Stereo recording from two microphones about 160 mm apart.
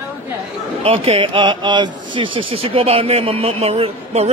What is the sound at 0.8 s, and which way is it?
Speech, 40° right (ahead or behind).